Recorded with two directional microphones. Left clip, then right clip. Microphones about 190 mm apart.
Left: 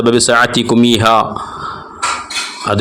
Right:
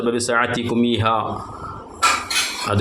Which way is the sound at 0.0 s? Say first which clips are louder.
Left 9 dB; 45° left (ahead or behind).